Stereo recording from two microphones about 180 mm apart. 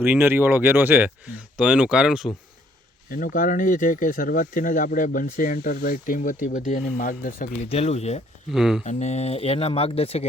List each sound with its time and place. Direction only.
0.0 s speech: 10° right (ahead or behind)
3.1 s speech: 50° left (ahead or behind)
7.7 s speech: 35° left (ahead or behind)
8.4 s speech: centre (ahead or behind)
8.8 s speech: 40° left (ahead or behind)